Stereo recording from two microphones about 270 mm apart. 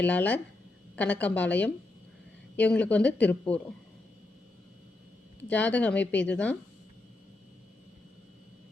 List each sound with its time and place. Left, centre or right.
0.0 s a woman's voice: centre
5.4 s a woman's voice: centre